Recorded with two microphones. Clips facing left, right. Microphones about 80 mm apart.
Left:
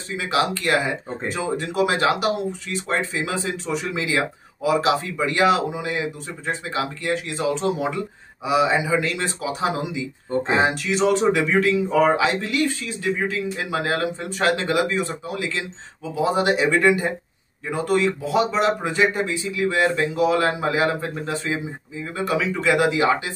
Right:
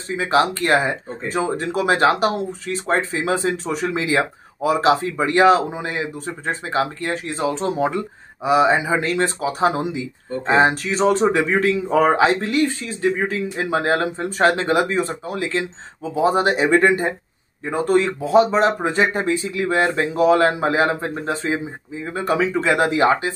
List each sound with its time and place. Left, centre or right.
0.2 s speech: right